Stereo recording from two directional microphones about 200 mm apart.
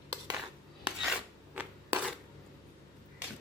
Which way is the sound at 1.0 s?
5° right (ahead or behind).